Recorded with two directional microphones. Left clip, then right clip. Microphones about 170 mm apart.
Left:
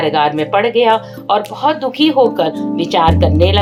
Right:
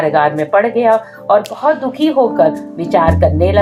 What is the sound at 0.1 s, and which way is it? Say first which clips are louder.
Speech: right 2 dB; 25° left (ahead or behind).